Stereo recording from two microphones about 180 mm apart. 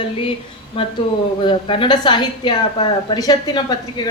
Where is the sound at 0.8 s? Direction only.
30° left (ahead or behind).